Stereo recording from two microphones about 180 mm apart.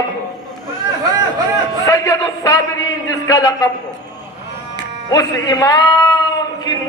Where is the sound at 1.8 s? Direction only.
20° left (ahead or behind).